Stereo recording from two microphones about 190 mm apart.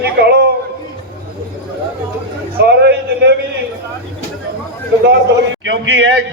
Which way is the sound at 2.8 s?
60° right (ahead or behind).